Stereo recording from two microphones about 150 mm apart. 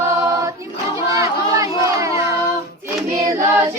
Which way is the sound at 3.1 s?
20° right (ahead or behind).